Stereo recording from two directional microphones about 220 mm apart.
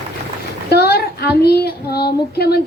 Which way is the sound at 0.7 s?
45° left (ahead or behind).